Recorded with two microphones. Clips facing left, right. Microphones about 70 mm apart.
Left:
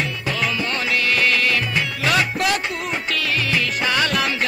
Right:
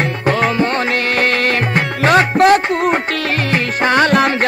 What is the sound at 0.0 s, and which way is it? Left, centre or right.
Music, right.